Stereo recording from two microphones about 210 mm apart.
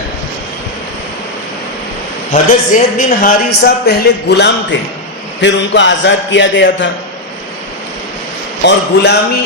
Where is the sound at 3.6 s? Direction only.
50° left (ahead or behind).